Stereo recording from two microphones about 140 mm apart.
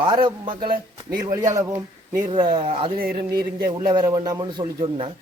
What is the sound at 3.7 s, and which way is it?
A man's voice, 30° right (ahead or behind).